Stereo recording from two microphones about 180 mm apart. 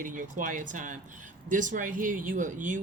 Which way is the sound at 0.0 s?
45° right (ahead or behind).